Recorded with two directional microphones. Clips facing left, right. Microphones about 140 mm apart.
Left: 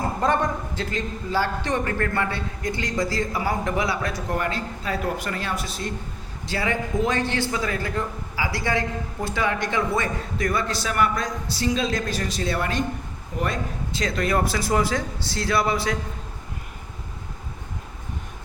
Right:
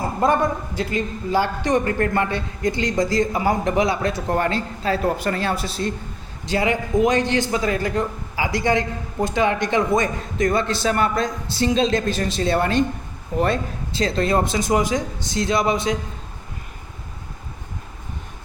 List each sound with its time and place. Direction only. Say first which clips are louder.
0.2 s a man's voice: right 5 dB; 10° right (ahead or behind); by 5.9 s 30° right (ahead or behind)
6.4 s a man's voice: right 5 dB; 20° right (ahead or behind)